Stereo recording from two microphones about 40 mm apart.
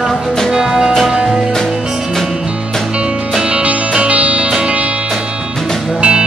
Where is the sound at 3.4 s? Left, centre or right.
Right.